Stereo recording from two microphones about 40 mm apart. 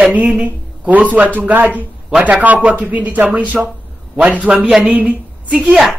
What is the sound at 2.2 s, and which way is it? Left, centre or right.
Speech, right.